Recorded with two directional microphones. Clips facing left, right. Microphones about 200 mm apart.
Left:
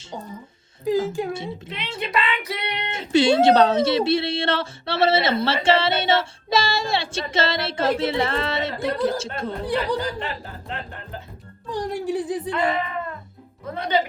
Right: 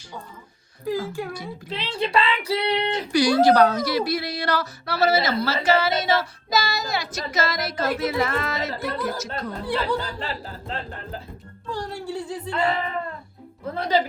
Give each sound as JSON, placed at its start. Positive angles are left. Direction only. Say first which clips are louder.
{"t": 0.9, "sound": "child singing", "louder": "left 5 dB", "side_deg": 20}
{"t": 2.0, "sound": "speech", "louder": "right 3 dB", "side_deg": -30}
{"t": 2.9, "sound": "child singing", "louder": "left 5 dB", "side_deg": 25}
{"t": 10.2, "sound": "speech", "louder": "left 1 dB", "side_deg": -35}
{"t": 11.7, "sound": "speech", "louder": "left 5 dB", "side_deg": 15}
{"t": 12.5, "sound": "speech", "louder": "left 1 dB", "side_deg": -30}